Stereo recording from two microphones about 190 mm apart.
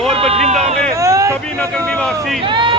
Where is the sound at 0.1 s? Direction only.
30° right (ahead or behind).